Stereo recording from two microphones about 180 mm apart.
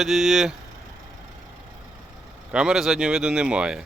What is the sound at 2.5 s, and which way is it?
Speech, 5° right (ahead or behind).